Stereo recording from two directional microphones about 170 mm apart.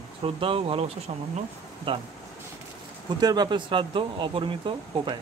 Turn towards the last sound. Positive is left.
turn(degrees=-30)  # may be behind; listen again after turning